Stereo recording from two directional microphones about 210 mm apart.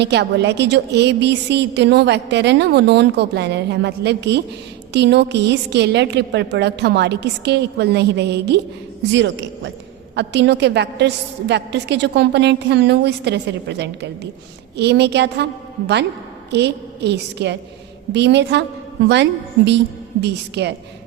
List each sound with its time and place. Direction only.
0.0 s a woman's voice: 55° right (ahead or behind)
16.5 s a woman's voice: 55° right (ahead or behind)